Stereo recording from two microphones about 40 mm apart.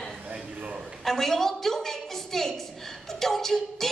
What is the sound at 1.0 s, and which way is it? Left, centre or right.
A woman's voice, centre.